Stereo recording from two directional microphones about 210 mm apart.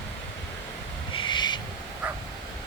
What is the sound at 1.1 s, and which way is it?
Owl, 25° left (ahead or behind).